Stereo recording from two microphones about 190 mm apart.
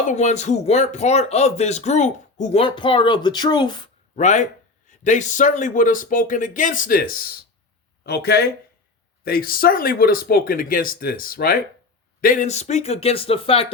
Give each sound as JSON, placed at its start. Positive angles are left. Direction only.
{"t": 0.1, "sound": "speech", "side_deg": 40}
{"t": 4.1, "sound": "speech", "side_deg": 40}